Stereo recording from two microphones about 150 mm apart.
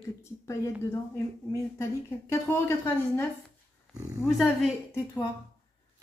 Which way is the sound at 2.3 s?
15° left (ahead or behind).